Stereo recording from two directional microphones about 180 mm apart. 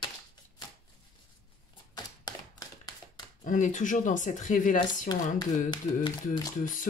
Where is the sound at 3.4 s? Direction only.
45° left (ahead or behind).